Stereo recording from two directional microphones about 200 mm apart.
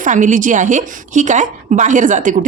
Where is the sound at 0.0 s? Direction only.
40° right (ahead or behind).